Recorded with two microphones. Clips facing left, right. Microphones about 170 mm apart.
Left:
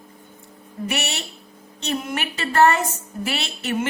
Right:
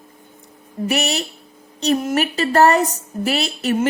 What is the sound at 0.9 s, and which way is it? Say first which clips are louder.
Speech: right 7 dB; 35° right (ahead or behind).